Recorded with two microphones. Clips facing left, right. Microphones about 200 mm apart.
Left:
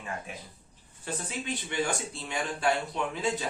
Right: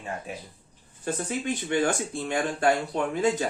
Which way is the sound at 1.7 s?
50° right (ahead or behind).